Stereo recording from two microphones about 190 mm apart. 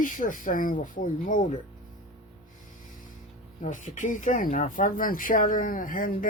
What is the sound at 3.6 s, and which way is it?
Speech, 40° left (ahead or behind).